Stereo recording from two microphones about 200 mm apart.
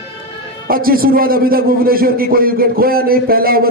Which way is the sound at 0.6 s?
45° right (ahead or behind).